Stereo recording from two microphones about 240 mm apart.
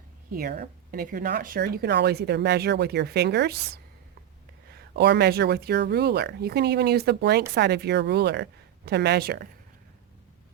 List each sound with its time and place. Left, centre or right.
0.3 s speech: right
4.7 s speech: right